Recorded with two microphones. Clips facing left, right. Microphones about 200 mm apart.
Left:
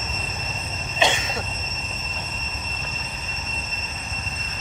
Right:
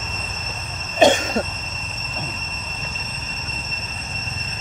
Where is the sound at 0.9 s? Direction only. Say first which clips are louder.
Right 9 dB; 45° right (ahead or behind).